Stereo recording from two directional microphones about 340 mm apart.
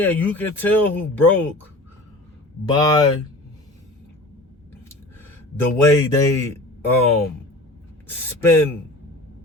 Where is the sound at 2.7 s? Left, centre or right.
Centre.